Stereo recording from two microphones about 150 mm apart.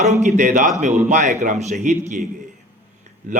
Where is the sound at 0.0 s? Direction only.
50° right (ahead or behind).